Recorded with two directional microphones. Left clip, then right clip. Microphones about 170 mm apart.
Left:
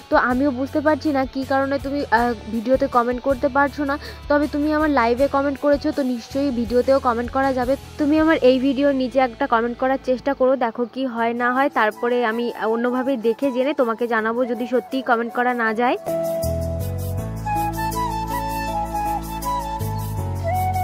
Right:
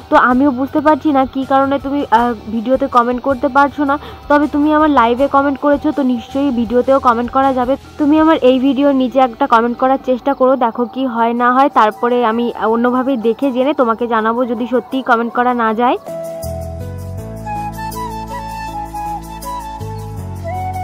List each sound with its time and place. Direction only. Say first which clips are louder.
0.1 s speech: right 7 dB; 40° left (ahead or behind)
6.7 s speech: right 6 dB; 40° left (ahead or behind)
17.5 s music: even; centre (ahead or behind)